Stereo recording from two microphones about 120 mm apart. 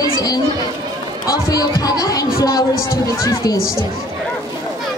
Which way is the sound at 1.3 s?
30° left (ahead or behind).